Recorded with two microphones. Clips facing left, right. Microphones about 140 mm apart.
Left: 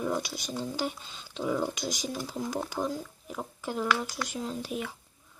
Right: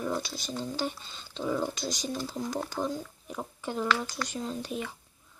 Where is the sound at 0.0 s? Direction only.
10° left (ahead or behind).